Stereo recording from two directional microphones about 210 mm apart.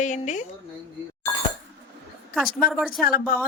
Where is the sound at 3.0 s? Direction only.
40° left (ahead or behind).